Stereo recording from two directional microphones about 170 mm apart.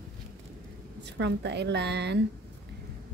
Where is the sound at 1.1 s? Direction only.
90° right.